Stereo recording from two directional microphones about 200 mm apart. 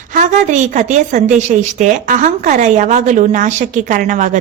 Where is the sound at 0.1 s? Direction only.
40° right (ahead or behind).